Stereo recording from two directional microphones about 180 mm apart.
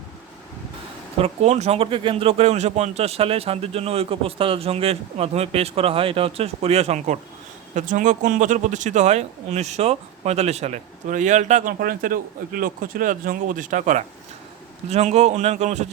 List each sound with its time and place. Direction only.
1.2 s speech: 35° right (ahead or behind)
11.8 s speech: 50° right (ahead or behind)